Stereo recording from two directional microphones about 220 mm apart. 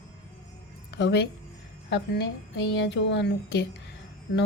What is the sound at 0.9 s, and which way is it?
A woman's voice, 50° left (ahead or behind).